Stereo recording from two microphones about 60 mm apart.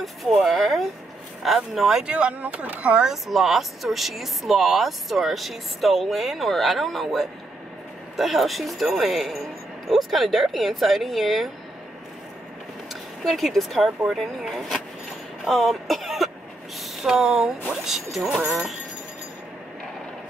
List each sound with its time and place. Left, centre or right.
0.0 s a sound: centre
1.4 s speech: centre
2.0 s speech: right
3.0 s speech: centre
13.2 s speech: centre